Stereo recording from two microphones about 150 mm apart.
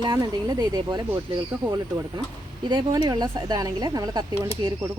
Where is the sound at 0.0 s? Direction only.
25° right (ahead or behind).